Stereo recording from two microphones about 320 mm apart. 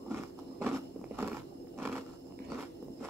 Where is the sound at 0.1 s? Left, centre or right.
Centre.